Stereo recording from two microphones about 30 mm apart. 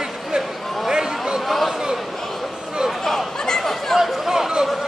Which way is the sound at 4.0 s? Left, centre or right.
Centre.